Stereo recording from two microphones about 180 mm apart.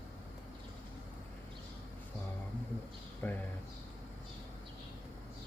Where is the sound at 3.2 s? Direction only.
10° left (ahead or behind).